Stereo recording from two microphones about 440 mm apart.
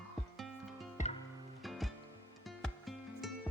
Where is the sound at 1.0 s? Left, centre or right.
Centre.